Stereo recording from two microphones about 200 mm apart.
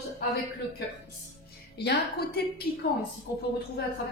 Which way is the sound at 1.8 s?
55° left (ahead or behind).